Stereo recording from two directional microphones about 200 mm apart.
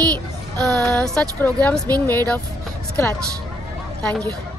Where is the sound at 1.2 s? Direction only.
5° left (ahead or behind).